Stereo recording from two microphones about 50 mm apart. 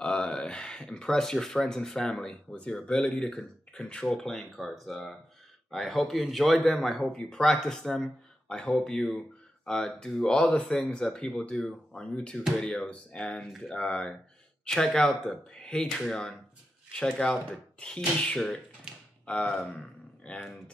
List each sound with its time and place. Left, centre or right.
0.0 s speech: centre
3.3 s a man's voice: left
20.2 s speech: left